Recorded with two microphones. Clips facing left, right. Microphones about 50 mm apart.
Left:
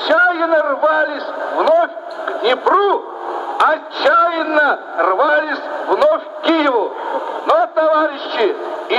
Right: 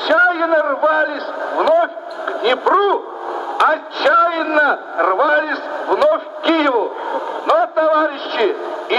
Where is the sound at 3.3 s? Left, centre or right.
Centre.